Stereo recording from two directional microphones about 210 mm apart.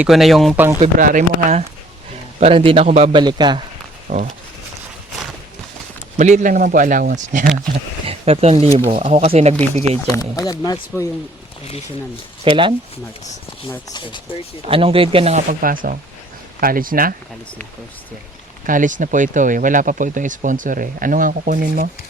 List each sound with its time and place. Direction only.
0.0 s speech: centre (ahead or behind)
0.8 s speech: 40° right (ahead or behind)
2.4 s speech: 25° right (ahead or behind)
3.2 s speech: 20° right (ahead or behind)
4.1 s speech: 35° right (ahead or behind)
6.1 s speech: 35° right (ahead or behind)
8.0 s speech: 30° right (ahead or behind)
10.1 s speech: 15° left (ahead or behind)
12.5 s speech: 25° right (ahead or behind)
13.9 s speech: 20° left (ahead or behind)
14.7 s speech: 25° right (ahead or behind); by 17.2 s 45° right (ahead or behind)
18.6 s speech: 40° right (ahead or behind)